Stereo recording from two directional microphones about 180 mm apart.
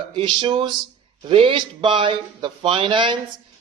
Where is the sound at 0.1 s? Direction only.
25° right (ahead or behind).